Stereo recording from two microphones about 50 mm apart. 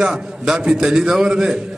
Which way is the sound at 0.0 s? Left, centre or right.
Centre.